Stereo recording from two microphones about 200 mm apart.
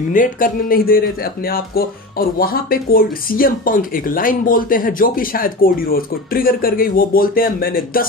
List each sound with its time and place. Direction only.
0.1 s speech: 45° left (ahead or behind)